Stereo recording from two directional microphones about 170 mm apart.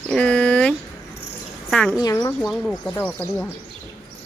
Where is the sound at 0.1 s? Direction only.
5° left (ahead or behind).